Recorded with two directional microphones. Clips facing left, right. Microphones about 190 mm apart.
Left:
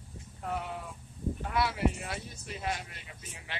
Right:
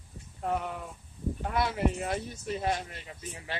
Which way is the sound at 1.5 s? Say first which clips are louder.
Right 1 dB; 45° right (ahead or behind).